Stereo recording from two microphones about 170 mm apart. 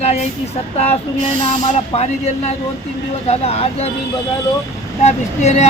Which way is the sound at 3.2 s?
35° left (ahead or behind).